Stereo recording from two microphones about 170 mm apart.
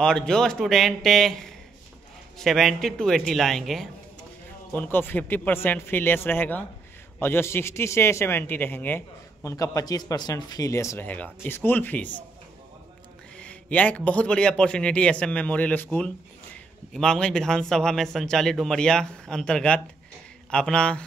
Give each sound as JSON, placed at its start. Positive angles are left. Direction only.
{"t": 0.0, "sound": "a man's voice", "side_deg": 5}
{"t": 4.7, "sound": "a man's voice", "side_deg": 10}
{"t": 13.4, "sound": "a man's voice", "side_deg": 10}